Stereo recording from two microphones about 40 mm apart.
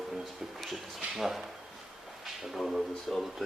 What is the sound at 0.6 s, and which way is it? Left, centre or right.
Speech, centre.